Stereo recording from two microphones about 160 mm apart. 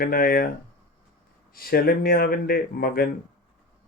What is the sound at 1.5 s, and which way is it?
Speech, 70° left (ahead or behind).